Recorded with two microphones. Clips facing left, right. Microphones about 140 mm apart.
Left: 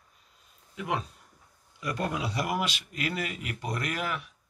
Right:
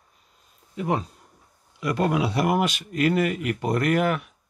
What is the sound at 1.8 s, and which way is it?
Speech, 90° right.